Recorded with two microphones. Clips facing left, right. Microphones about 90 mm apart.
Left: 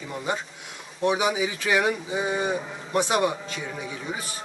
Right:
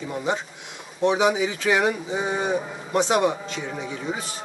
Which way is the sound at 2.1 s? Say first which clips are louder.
Right 2 dB; 15° right (ahead or behind).